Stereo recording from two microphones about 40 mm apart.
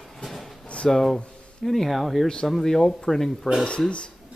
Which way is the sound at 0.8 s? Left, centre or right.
Centre.